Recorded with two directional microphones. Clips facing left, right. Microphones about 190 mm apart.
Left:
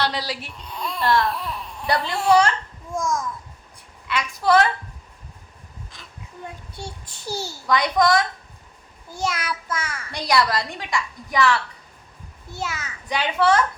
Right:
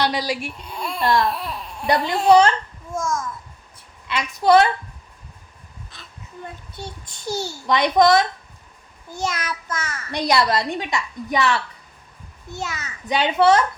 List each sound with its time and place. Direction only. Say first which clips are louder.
0.0 s speech: right 4 dB; 15° right (ahead or behind)
2.9 s a child's voice: even; centre (ahead or behind)
4.1 s a woman's voice: right 3 dB; 20° right (ahead or behind)
5.9 s a sound: even; 15° left (ahead or behind)
6.7 s a child's voice: right 1 dB; 10° left (ahead or behind)
7.7 s a woman's voice: right 3 dB; 25° right (ahead or behind)
9.1 s a child's voice: even; 10° left (ahead or behind)
10.1 s a woman's voice: right 2 dB; 25° right (ahead or behind)
12.5 s a child's voice: even; 10° left (ahead or behind)
13.1 s a woman's voice: right 4 dB; 25° right (ahead or behind)